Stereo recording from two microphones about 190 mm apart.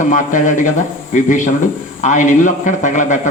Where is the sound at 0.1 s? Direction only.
45° left (ahead or behind).